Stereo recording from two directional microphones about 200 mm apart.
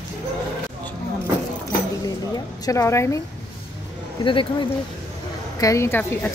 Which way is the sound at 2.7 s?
15° left (ahead or behind).